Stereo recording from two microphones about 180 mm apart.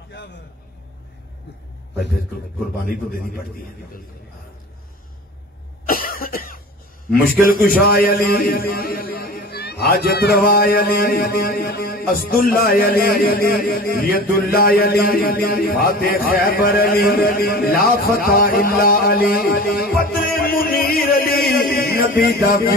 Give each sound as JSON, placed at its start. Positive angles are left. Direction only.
{"t": 2.8, "sound": "a man's voice", "side_deg": 55}
{"t": 5.9, "sound": "cough", "side_deg": 55}
{"t": 7.2, "sound": "a man's voice", "side_deg": 55}
{"t": 20.0, "sound": "music", "side_deg": 55}